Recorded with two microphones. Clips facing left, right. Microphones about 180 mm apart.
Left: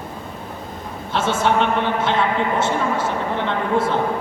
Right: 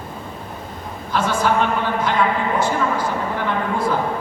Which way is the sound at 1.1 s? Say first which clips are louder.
Even; 25° left (ahead or behind).